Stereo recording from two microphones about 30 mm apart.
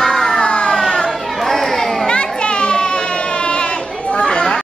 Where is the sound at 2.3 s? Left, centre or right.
Left.